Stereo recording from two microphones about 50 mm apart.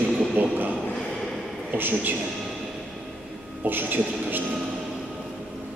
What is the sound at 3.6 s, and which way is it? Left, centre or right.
Speech, right.